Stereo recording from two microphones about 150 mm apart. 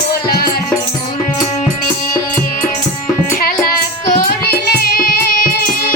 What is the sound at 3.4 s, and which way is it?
Music, 90° left.